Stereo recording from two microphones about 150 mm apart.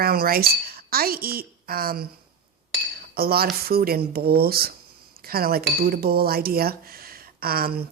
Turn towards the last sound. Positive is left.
turn(degrees=-85)